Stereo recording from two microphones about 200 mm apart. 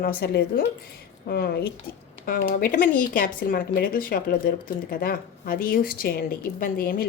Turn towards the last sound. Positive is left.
turn(degrees=50)  # may be behind; listen again after turning